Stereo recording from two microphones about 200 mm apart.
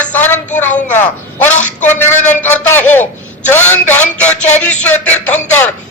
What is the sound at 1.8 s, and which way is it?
A man's voice, 10° left (ahead or behind).